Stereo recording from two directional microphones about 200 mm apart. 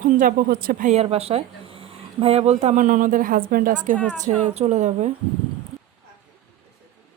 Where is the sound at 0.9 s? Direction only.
30° right (ahead or behind).